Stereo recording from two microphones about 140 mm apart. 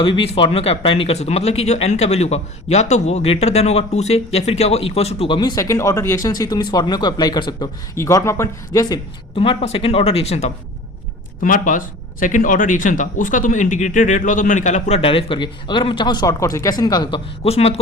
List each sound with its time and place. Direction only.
0.0 s speech: 40° left (ahead or behind)
5.4 s speech: 25° left (ahead or behind)
7.9 s speech: 20° left (ahead or behind)
9.3 s speech: 40° left (ahead or behind)
11.3 s speech: 75° left (ahead or behind); by 17.7 s 45° left (ahead or behind)